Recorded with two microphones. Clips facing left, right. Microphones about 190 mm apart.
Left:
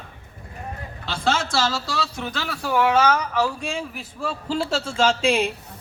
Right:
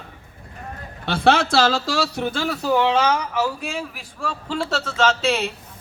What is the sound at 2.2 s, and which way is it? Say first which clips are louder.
A man's voice: right 5 dB; 30° right (ahead or behind).